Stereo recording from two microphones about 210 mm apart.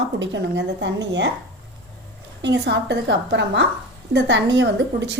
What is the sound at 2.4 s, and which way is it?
A woman's voice, 55° right (ahead or behind).